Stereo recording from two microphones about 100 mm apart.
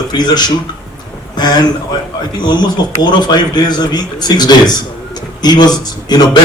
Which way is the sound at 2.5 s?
45° left (ahead or behind).